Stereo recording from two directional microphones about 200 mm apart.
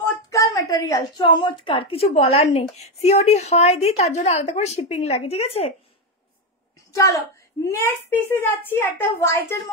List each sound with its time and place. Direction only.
0.0 s a woman's voice: 15° left (ahead or behind); by 5.7 s 30° left (ahead or behind)
6.9 s a woman's voice: 15° left (ahead or behind)